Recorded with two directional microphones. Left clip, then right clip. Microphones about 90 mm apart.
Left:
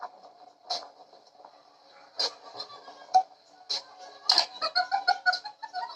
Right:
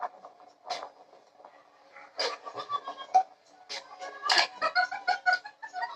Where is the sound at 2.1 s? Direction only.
30° right (ahead or behind).